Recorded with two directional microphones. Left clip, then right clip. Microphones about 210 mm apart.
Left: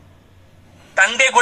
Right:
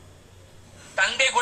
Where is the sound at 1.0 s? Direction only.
35° left (ahead or behind).